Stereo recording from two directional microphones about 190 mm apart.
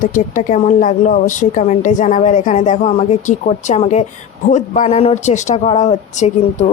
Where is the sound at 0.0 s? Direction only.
45° left (ahead or behind).